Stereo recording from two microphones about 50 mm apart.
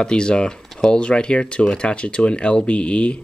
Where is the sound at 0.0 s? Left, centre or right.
Centre.